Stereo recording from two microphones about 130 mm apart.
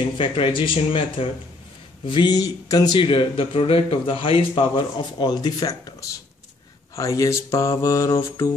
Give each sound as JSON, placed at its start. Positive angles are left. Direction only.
{"t": 0.2, "sound": "speech", "side_deg": 40}